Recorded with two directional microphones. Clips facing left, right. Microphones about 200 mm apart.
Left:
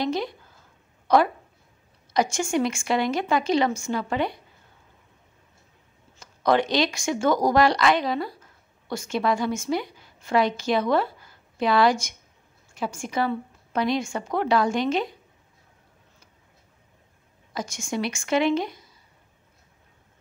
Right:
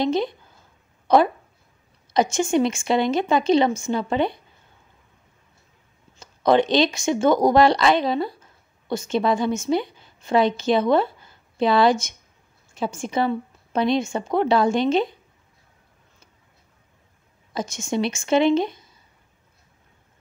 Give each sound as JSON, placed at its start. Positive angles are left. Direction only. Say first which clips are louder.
{"t": 0.0, "sound": "speech", "louder": "right 4 dB", "side_deg": -25}
{"t": 1.0, "sound": "a sound", "louder": "right 3 dB", "side_deg": -25}
{"t": 2.1, "sound": "speech", "louder": "right 4 dB", "side_deg": -20}
{"t": 6.1, "sound": "a woman's voice", "louder": "right 4 dB", "side_deg": -25}
{"t": 17.6, "sound": "speech", "louder": "right 4 dB", "side_deg": -20}